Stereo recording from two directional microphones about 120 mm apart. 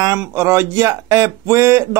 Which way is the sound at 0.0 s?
25° right (ahead or behind).